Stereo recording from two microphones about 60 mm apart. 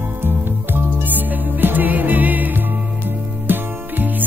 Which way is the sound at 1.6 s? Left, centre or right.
Right.